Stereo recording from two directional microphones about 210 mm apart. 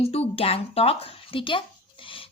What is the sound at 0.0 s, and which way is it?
A woman's voice, 30° left (ahead or behind).